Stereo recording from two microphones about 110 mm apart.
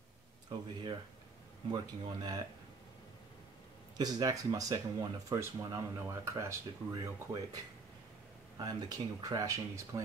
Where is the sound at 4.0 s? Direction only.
35° right (ahead or behind).